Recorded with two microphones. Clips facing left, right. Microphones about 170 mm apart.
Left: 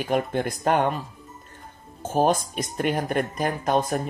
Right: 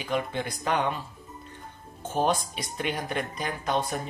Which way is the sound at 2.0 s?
45° left (ahead or behind).